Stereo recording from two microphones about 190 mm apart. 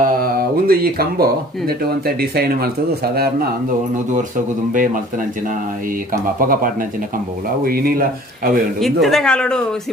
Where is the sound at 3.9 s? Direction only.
40° right (ahead or behind).